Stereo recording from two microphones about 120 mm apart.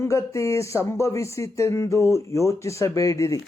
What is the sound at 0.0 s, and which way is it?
Speech, 25° left (ahead or behind).